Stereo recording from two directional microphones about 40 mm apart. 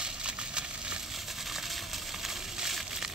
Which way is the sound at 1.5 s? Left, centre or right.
Centre.